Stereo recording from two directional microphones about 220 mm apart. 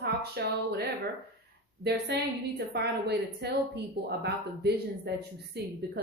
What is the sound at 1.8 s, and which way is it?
A woman's voice, 50° right (ahead or behind).